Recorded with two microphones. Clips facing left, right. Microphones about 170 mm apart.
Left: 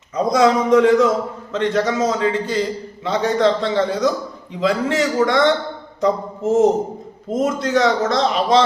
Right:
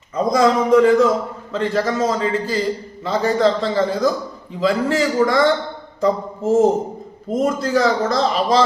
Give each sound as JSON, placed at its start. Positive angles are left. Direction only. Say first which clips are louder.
{"t": 0.2, "sound": "a man's voice", "louder": "even", "side_deg": 0}